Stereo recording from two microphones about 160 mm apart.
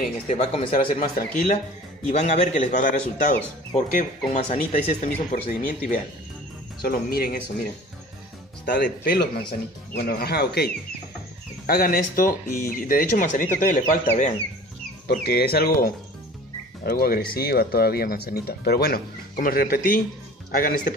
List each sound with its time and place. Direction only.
0.4 s speech: 40° left (ahead or behind)
0.7 s speech: 55° left (ahead or behind)
2.0 s a man's voice: 45° left (ahead or behind)
6.8 s speech: 70° left (ahead or behind)
8.6 s speech: 75° left (ahead or behind)
11.6 s speech: 65° left (ahead or behind)
15.0 s speech: 75° left (ahead or behind)